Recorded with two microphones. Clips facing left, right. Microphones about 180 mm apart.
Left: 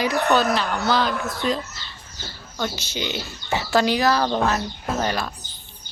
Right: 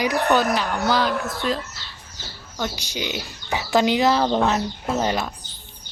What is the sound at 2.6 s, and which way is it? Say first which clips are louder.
Speech: even; 15° right (ahead or behind).